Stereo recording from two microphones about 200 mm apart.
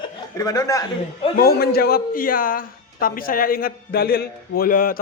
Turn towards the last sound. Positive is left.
turn(degrees=45)  # may be behind; listen again after turning